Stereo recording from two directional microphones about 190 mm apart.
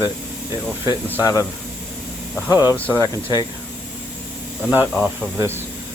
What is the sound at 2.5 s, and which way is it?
Speech, 10° right (ahead or behind).